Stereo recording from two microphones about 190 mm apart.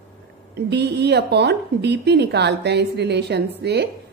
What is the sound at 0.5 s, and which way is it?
A woman's voice, 60° right (ahead or behind).